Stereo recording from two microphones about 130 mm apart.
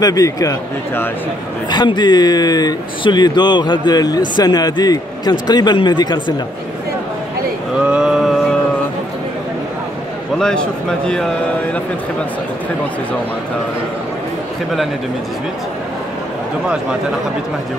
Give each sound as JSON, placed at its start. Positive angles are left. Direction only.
{"t": 0.0, "sound": "speech", "side_deg": 25}
{"t": 7.8, "sound": "a sound", "side_deg": -5}
{"t": 10.4, "sound": "a man's voice", "side_deg": 5}